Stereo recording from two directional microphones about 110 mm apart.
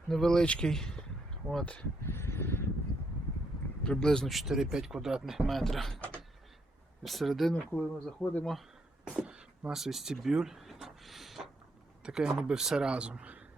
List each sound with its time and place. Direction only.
0.1 s speech: 5° left (ahead or behind)
2.0 s a sound: 25° left (ahead or behind)
3.8 s speech: 5° left (ahead or behind)
7.0 s speech: centre (ahead or behind)
7.5 s speech: 10° left (ahead or behind)
9.0 s speech: 5° right (ahead or behind)